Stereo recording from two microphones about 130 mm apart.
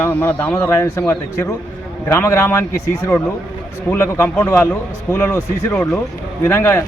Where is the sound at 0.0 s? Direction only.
15° left (ahead or behind).